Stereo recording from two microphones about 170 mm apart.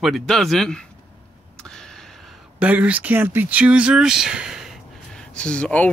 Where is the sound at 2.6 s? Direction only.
10° right (ahead or behind).